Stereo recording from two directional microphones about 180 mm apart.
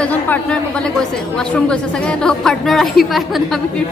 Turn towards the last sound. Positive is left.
turn(degrees=0)  # may be behind; listen again after turning